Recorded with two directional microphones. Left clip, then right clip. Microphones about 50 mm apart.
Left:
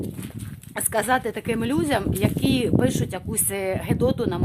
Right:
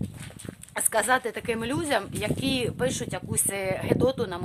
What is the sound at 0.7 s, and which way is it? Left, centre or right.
Speech, centre.